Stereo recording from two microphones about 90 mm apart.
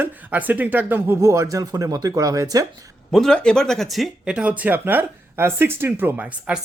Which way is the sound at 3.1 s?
5° left (ahead or behind).